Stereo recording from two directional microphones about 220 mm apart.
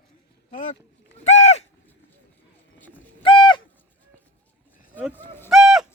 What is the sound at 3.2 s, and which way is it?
Bird, 20° left (ahead or behind).